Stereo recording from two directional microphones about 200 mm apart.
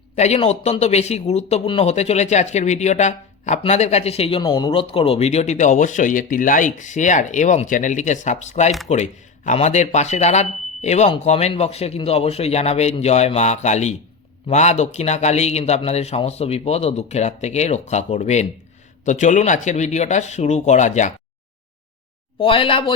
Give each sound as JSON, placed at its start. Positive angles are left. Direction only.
{"t": 0.2, "sound": "speech", "side_deg": 30}
{"t": 22.4, "sound": "speech", "side_deg": 25}